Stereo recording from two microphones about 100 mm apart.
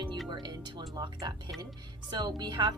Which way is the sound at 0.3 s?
45° right (ahead or behind).